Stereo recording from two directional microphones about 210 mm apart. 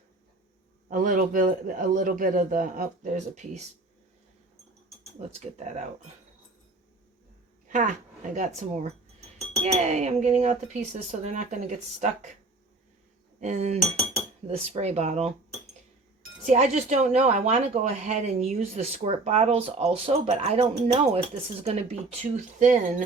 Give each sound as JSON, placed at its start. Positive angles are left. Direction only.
{"t": 0.9, "sound": "speech", "side_deg": -40}
{"t": 5.2, "sound": "speech", "side_deg": -30}
{"t": 7.7, "sound": "speech", "side_deg": -35}
{"t": 13.4, "sound": "speech", "side_deg": -35}
{"t": 16.5, "sound": "speech", "side_deg": -35}